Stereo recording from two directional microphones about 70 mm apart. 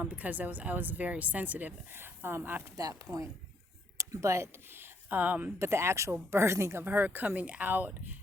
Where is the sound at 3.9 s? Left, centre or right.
Right.